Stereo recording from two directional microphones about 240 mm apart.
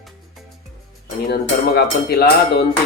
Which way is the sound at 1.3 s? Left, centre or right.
Left.